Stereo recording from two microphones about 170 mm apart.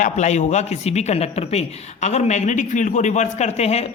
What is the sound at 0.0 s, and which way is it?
A man's voice, 45° left (ahead or behind).